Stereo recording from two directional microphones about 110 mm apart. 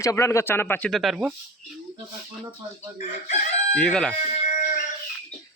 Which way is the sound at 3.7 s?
10° left (ahead or behind).